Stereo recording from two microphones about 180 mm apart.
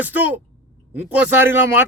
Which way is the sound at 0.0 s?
10° right (ahead or behind).